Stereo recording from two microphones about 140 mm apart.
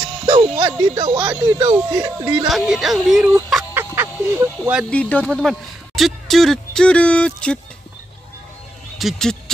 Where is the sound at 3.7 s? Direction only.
15° right (ahead or behind).